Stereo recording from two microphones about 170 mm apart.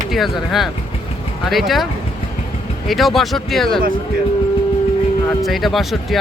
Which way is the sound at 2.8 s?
Centre (ahead or behind).